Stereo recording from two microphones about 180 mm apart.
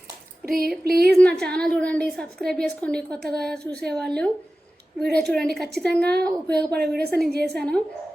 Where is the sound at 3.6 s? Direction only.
60° right (ahead or behind).